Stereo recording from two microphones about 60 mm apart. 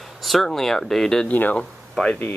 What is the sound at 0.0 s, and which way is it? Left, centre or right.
Speech, centre.